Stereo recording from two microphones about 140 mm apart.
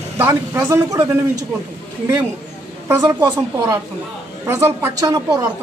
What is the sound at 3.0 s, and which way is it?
Speech, 30° right (ahead or behind).